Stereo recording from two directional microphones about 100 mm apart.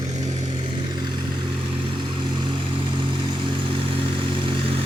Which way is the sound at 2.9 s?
55° right (ahead or behind).